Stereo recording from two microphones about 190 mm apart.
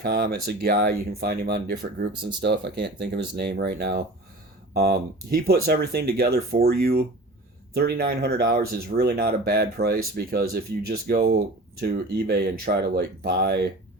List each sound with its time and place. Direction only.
0.0 s speech: 55° right (ahead or behind)